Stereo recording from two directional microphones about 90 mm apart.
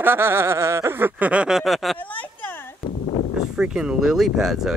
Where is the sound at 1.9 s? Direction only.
20° left (ahead or behind).